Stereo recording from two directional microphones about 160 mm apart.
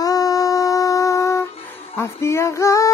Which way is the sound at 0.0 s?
25° left (ahead or behind).